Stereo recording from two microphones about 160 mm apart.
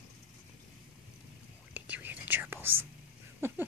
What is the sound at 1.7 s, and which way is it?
Whispering, 10° right (ahead or behind).